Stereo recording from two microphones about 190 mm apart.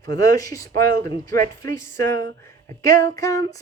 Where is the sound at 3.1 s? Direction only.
15° left (ahead or behind).